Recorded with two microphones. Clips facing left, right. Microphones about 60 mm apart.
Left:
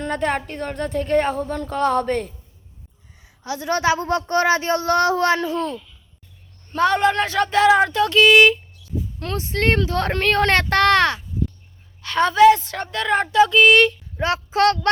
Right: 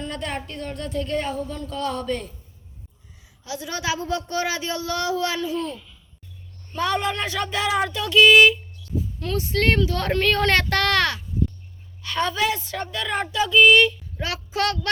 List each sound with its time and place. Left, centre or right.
0.0 s a child's voice: left
3.4 s a child's voice: left
6.7 s speech: left
9.3 s speech: left